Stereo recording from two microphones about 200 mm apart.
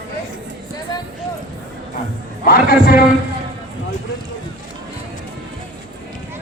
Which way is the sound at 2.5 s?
45° left (ahead or behind).